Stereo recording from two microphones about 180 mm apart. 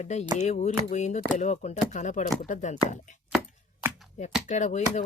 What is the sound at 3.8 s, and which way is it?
Shuffling cards, 10° right (ahead or behind).